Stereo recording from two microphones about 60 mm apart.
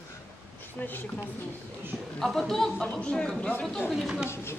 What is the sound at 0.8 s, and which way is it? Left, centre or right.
Speech, left.